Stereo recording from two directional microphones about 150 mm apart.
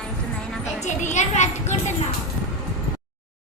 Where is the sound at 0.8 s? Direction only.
55° left (ahead or behind).